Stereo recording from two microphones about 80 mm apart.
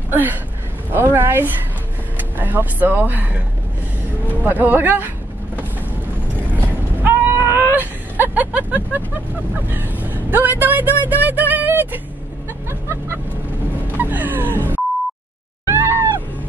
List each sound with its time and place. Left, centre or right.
0.1 s speech: right
6.5 s a sound: right
9.7 s speech: right
12.6 s vehicle: right
13.9 s music: right
15.7 s screaming: right